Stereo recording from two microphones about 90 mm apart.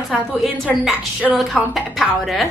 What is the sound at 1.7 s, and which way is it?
Speech, centre (ahead or behind).